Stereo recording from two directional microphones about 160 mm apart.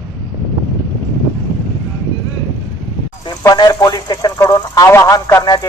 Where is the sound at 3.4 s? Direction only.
25° left (ahead or behind).